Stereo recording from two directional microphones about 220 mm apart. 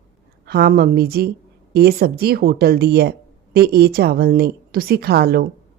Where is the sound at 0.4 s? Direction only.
45° right (ahead or behind).